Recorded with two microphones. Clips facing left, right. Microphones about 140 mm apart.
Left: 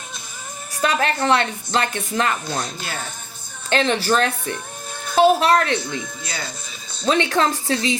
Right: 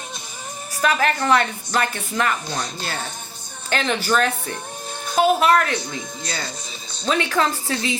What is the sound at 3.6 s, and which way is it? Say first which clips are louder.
Speech: left 3 dB; 30° left (ahead or behind).